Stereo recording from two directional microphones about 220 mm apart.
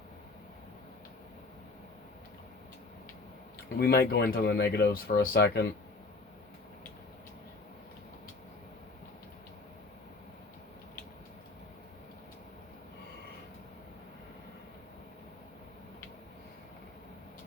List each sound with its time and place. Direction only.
3.8 s speech: 45° left (ahead or behind)